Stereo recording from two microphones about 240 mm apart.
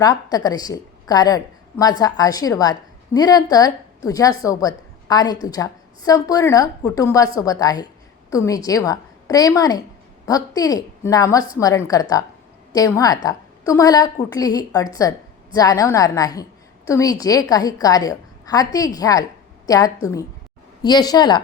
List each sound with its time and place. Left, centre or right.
0.0 s a woman's voice: centre